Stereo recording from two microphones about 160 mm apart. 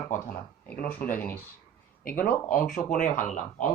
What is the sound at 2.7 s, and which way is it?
Speech, 55° left (ahead or behind).